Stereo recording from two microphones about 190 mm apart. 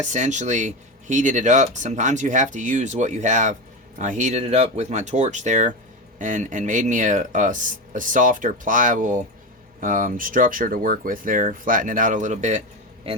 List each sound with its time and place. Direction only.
0.0 s speech: 40° right (ahead or behind)